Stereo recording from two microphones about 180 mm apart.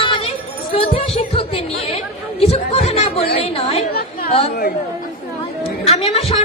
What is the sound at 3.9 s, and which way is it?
Speech, 55° left (ahead or behind).